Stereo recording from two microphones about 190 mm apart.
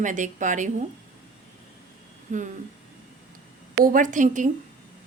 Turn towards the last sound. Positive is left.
turn(degrees=-40)  # may be behind; listen again after turning